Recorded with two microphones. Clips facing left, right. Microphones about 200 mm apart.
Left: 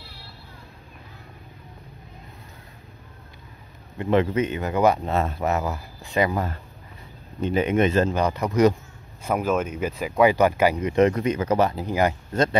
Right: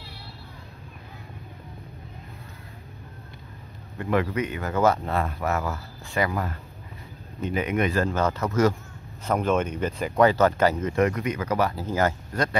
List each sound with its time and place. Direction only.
4.0 s speech: 25° left (ahead or behind)